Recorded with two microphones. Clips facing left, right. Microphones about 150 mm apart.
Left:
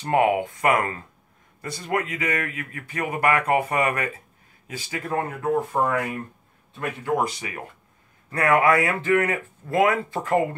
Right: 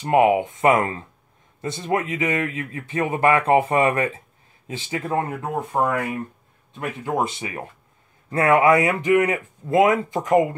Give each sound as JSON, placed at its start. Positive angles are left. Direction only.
{"t": 0.0, "sound": "speech", "side_deg": -20}